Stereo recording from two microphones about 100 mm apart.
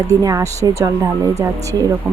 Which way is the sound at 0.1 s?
35° right (ahead or behind).